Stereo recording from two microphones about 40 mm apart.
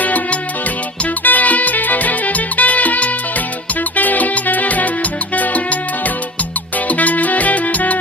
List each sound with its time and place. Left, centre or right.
0.0 s music: left
6.8 s music: left